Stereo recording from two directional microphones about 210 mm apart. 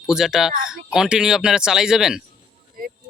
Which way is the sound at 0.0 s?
Centre (ahead or behind).